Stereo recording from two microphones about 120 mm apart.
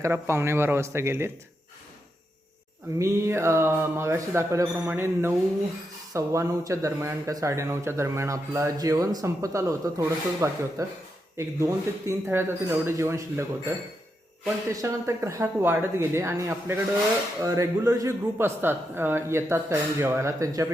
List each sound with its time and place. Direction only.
0.0 s speech: 20° right (ahead or behind)
3.0 s speech: 25° right (ahead or behind)
14.7 s speech: 25° right (ahead or behind)